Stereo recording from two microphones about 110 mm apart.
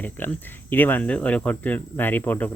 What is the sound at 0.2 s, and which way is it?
Speech, 20° left (ahead or behind).